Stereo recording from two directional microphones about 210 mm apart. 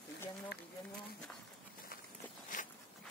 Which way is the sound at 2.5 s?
40° left (ahead or behind).